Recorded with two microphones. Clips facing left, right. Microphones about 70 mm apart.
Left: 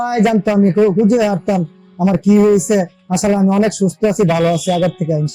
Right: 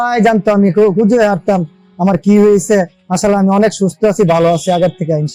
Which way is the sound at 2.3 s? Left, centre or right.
Right.